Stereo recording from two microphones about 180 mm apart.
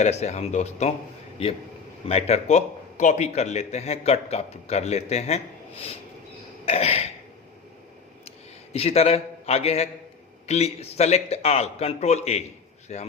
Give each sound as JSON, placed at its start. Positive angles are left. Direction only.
{"t": 0.0, "sound": "speech", "side_deg": 40}
{"t": 2.0, "sound": "speech", "side_deg": 35}
{"t": 8.7, "sound": "speech", "side_deg": 35}